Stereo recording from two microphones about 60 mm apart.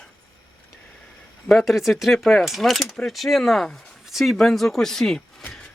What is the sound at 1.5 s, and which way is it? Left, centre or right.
Speech, centre.